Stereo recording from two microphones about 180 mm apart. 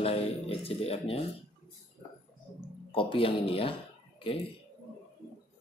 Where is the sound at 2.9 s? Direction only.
30° left (ahead or behind).